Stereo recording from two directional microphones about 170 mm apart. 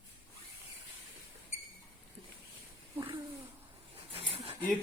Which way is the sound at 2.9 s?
30° right (ahead or behind).